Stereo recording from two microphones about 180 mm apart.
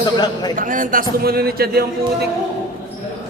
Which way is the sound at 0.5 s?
45° right (ahead or behind).